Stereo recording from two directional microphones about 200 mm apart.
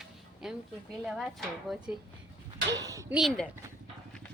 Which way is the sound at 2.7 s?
15° right (ahead or behind).